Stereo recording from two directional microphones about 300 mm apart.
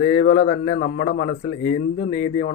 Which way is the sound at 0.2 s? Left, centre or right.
Left.